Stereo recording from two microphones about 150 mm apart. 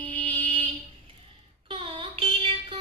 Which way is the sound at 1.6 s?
35° right (ahead or behind).